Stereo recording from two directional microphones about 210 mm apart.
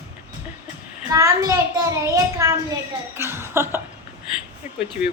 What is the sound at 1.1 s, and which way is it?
A child's voice, 15° right (ahead or behind).